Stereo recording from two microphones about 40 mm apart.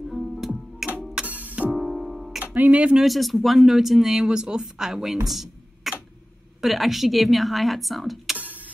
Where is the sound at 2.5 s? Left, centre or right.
Right.